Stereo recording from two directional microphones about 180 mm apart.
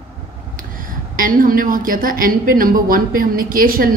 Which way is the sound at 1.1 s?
50° right (ahead or behind).